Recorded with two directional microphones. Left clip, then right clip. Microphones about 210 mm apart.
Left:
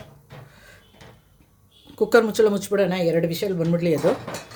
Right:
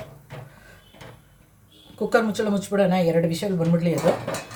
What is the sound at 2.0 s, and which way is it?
Speech, 55° left (ahead or behind).